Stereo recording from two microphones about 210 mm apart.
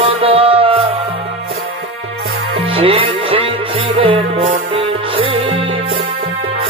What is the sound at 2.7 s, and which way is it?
Music, 25° right (ahead or behind).